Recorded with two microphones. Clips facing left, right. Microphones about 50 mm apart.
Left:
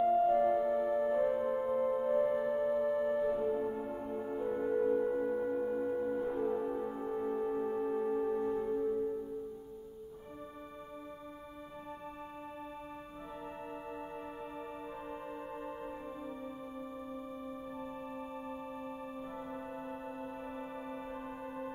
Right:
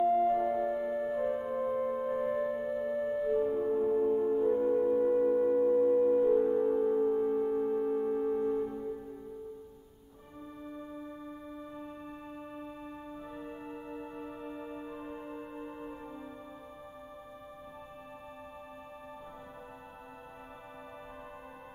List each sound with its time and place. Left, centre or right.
0.0 s music: centre
2.4 s music: centre
5.1 s singing bowl: centre
6.2 s music: centre